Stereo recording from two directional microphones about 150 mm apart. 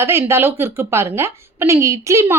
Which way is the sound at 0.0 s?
15° right (ahead or behind).